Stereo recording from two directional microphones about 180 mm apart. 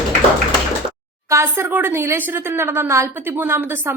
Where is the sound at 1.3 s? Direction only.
15° right (ahead or behind).